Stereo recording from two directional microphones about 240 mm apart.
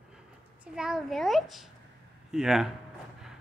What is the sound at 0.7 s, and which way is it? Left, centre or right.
A child's voice, centre.